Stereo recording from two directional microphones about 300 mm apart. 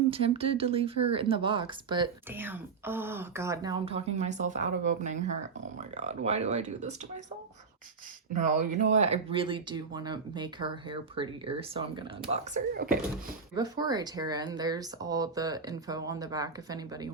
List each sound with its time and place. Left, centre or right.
0.1 s speech: centre
8.3 s speech: right
13.6 s speech: centre